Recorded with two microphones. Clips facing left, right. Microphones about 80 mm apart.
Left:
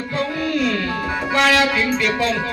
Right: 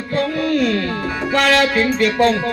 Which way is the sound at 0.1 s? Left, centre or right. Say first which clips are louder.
Right 4 dB; right.